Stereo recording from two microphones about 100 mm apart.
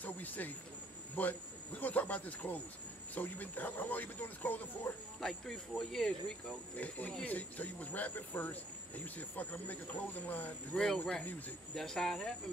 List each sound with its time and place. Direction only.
0.0 s cricket: 15° left (ahead or behind)
1.1 s speech: 15° left (ahead or behind)
5.2 s speech: 5° left (ahead or behind)